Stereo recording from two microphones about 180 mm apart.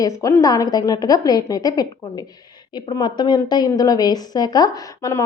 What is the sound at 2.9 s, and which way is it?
A woman's voice, 25° left (ahead or behind).